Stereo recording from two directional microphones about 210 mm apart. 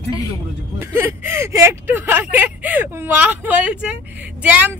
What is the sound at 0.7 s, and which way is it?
Speech, 10° right (ahead or behind).